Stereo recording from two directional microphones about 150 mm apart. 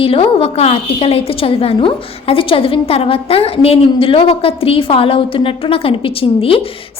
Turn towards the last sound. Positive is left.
turn(degrees=40)  # may be behind; listen again after turning